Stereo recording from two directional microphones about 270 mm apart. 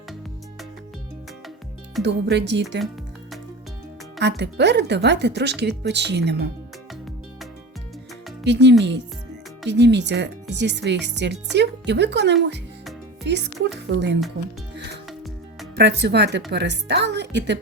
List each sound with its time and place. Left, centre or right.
2.0 s speech: right
4.2 s speech: right
8.4 s speech: right
15.7 s speech: right